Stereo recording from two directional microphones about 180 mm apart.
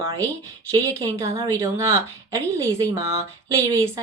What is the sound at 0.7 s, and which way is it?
A woman's voice, 20° right (ahead or behind).